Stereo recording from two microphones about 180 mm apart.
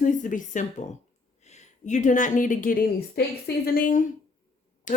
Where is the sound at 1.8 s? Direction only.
45° left (ahead or behind).